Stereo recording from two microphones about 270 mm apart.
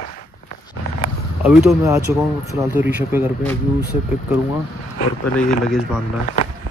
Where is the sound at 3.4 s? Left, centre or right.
Centre.